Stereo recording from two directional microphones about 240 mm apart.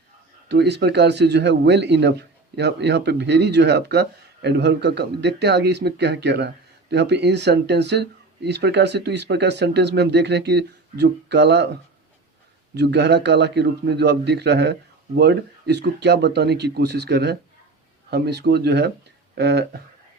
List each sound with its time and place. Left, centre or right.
0.4 s a man's voice: right